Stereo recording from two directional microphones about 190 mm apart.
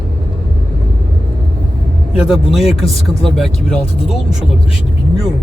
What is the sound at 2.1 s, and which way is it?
Speech, centre (ahead or behind).